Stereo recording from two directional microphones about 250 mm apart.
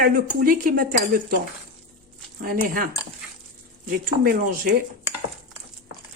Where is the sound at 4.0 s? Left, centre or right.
Right.